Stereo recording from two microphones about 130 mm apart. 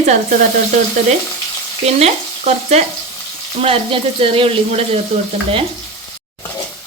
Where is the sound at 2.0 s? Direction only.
55° right (ahead or behind).